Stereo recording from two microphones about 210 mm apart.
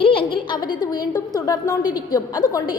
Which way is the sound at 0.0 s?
25° left (ahead or behind).